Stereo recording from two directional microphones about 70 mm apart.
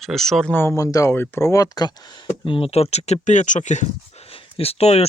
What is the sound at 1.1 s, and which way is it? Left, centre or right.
Speech, left.